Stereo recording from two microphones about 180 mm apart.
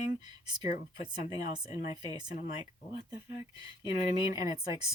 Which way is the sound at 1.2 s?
40° left (ahead or behind).